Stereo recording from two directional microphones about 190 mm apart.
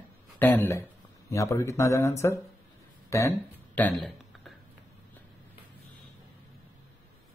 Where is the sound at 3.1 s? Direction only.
15° left (ahead or behind).